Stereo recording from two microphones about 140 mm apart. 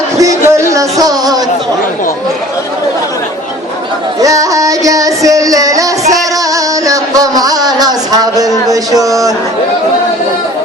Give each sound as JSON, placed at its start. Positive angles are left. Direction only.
{"t": 0.2, "sound": "music", "side_deg": -20}
{"t": 4.2, "sound": "music", "side_deg": -25}
{"t": 8.7, "sound": "speech", "side_deg": -25}